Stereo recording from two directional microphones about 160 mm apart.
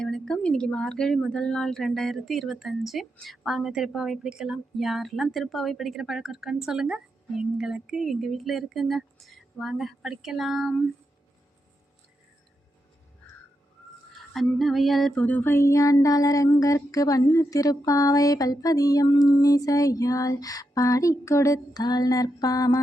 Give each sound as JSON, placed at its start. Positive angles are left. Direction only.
{"t": 0.0, "sound": "speech", "side_deg": 5}
{"t": 14.3, "sound": "child singing", "side_deg": 0}